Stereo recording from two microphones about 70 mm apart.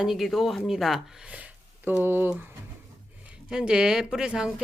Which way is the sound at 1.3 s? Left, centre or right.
Right.